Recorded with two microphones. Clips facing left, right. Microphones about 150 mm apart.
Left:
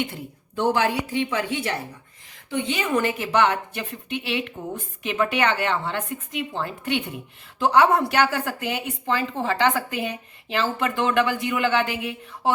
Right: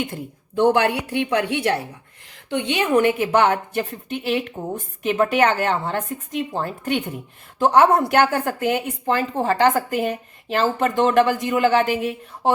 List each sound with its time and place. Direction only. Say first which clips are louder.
0.6 s a woman's voice: right 4 dB; 60° right (ahead or behind); by 12.5 s 40° right (ahead or behind)